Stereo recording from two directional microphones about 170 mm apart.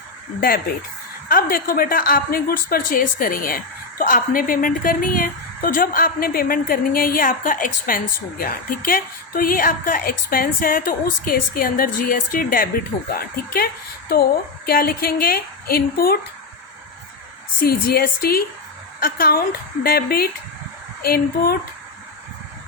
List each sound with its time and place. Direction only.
0.3 s a woman's voice: 60° left (ahead or behind)
14.7 s a woman's voice: 60° left (ahead or behind)
17.6 s a woman's voice: 60° left (ahead or behind)